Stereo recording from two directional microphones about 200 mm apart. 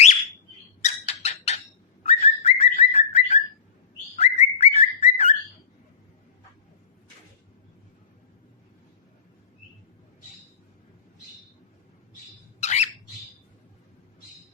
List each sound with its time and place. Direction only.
0.8 s a sound: 30° left (ahead or behind)
2.0 s bird: 30° left (ahead or behind)
12.6 s squawk: 35° left (ahead or behind)